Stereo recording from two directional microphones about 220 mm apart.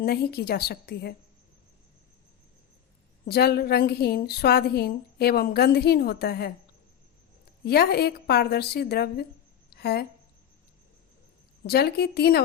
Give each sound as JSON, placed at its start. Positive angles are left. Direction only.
{"t": 0.0, "sound": "a woman's voice", "side_deg": 45}
{"t": 3.2, "sound": "a woman's voice", "side_deg": 45}
{"t": 7.6, "sound": "a woman's voice", "side_deg": 45}
{"t": 11.6, "sound": "a woman's voice", "side_deg": 45}